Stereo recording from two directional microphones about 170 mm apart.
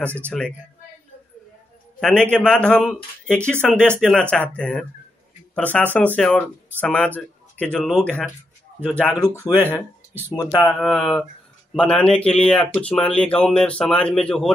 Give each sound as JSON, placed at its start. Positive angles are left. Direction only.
{"t": 2.0, "sound": "a man's voice", "side_deg": 5}
{"t": 9.1, "sound": "speech", "side_deg": 20}
{"t": 10.6, "sound": "speech", "side_deg": 0}